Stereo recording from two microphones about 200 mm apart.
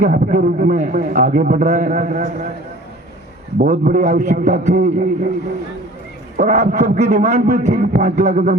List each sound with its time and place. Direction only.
0.0 s a man's voice: 35° right (ahead or behind)
3.6 s a man's voice: 40° right (ahead or behind)
6.3 s a man's voice: 35° right (ahead or behind)